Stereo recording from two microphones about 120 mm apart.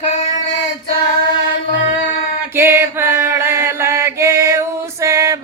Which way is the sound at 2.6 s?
20° right (ahead or behind).